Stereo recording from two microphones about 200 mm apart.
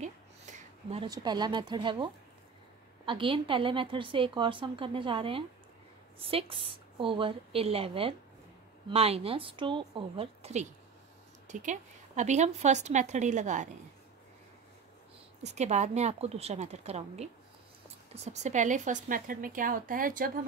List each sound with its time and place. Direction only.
0.0 s a sound: 35° right (ahead or behind)
1.0 s a woman's voice: 20° right (ahead or behind)
3.1 s a woman's voice: 25° right (ahead or behind)
15.4 s a woman's voice: 35° right (ahead or behind)